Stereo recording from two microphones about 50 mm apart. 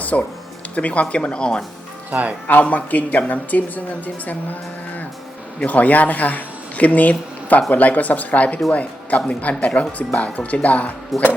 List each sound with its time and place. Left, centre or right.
0.0 s speech: left
2.0 s speech: right
2.5 s a woman's voice: left
5.5 s a woman's voice: left